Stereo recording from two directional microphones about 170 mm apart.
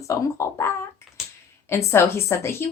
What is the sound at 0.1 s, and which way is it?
A woman's voice, 20° left (ahead or behind).